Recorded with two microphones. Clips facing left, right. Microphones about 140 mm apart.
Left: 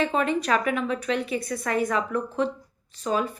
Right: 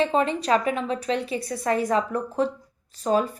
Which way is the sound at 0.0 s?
30° right (ahead or behind).